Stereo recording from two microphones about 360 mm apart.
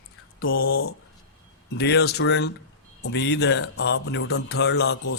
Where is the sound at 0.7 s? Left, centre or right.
Left.